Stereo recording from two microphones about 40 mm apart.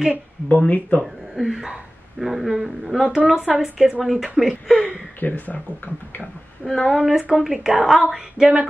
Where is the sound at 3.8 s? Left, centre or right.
Right.